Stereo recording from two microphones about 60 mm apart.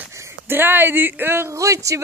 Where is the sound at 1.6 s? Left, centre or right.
Right.